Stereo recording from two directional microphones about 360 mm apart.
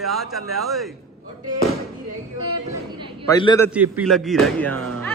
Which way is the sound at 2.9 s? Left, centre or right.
Centre.